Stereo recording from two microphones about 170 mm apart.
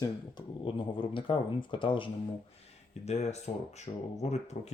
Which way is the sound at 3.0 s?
40° left (ahead or behind).